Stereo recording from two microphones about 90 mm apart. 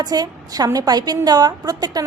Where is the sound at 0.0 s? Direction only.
45° right (ahead or behind).